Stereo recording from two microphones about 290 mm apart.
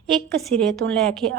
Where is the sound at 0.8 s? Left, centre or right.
Right.